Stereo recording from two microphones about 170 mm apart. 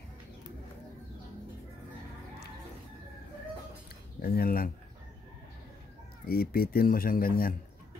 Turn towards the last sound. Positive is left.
turn(degrees=60)  # may be behind; listen again after turning